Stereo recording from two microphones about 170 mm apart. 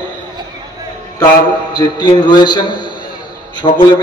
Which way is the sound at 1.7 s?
25° left (ahead or behind).